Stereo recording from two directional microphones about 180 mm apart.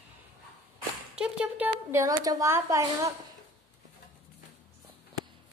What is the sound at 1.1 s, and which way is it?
A woman's voice, 5° right (ahead or behind).